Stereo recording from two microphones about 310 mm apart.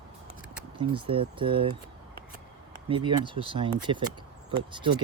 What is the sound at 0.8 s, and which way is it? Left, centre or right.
Speech, centre.